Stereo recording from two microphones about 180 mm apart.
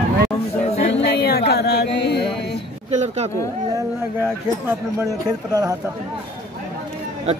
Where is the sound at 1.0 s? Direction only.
65° left (ahead or behind).